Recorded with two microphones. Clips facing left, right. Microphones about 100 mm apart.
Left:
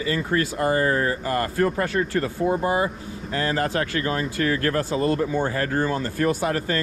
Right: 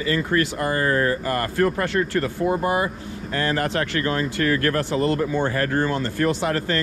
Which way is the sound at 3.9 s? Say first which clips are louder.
Right 1 dB; 50° right (ahead or behind).